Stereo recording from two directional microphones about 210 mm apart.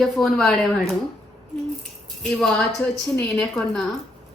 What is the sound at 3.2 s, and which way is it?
Speech, 5° left (ahead or behind).